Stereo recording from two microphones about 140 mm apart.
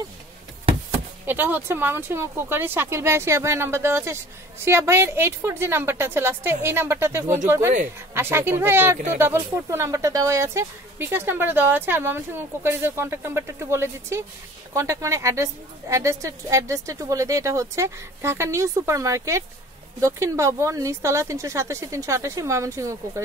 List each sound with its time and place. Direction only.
1.2 s a woman's voice: 15° right (ahead or behind)